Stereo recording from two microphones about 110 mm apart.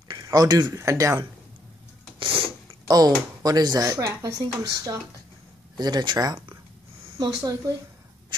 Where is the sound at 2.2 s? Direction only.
55° right (ahead or behind).